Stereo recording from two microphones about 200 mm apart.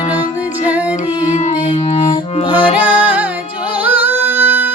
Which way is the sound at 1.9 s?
25° left (ahead or behind).